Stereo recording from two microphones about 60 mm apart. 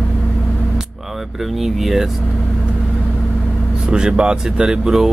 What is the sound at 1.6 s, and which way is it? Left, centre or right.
Speech, centre.